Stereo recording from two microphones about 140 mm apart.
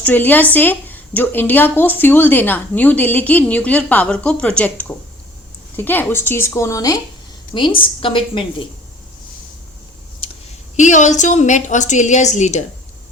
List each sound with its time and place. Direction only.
0.0 s speech: 15° left (ahead or behind)
7.5 s a woman's voice: 35° left (ahead or behind)
10.8 s a woman's voice: 60° left (ahead or behind)